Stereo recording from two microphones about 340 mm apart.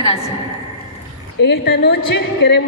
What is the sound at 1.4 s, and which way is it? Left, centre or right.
Speech, left.